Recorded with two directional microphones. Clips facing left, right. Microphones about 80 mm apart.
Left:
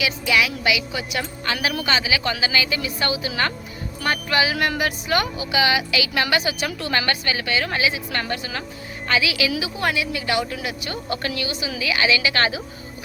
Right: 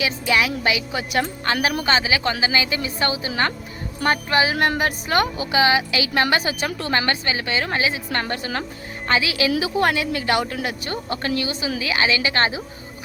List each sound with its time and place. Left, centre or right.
0.0 s speech: right